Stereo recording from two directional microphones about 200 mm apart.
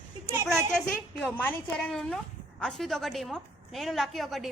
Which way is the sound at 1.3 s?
5° left (ahead or behind).